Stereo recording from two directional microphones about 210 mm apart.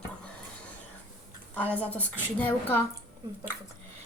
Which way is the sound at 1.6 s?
5° left (ahead or behind).